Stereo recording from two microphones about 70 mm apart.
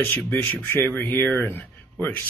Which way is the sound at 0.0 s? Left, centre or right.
Left.